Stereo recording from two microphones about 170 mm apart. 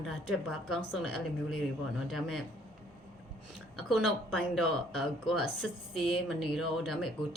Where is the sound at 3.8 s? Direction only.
Centre (ahead or behind).